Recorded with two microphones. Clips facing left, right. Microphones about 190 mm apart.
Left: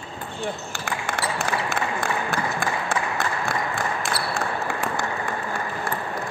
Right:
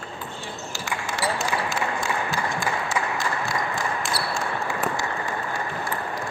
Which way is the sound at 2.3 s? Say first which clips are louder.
Left 1 dB; 55° left (ahead or behind).